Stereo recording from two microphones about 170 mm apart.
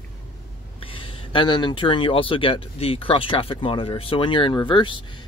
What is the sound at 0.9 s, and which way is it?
Speech, 30° left (ahead or behind).